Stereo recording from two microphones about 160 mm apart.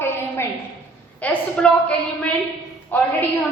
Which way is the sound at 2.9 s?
10° left (ahead or behind).